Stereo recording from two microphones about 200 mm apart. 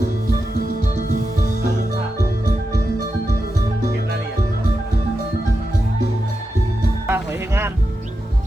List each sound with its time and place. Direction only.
7.1 s music: 10° right (ahead or behind)